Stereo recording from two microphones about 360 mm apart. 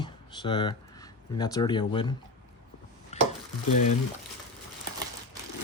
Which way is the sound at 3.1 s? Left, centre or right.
Centre.